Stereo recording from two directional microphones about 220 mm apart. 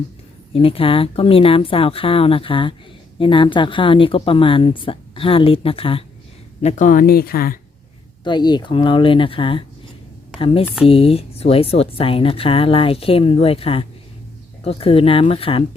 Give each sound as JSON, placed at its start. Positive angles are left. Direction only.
{"t": 0.5, "sound": "speech", "side_deg": 25}
{"t": 8.2, "sound": "speech", "side_deg": 20}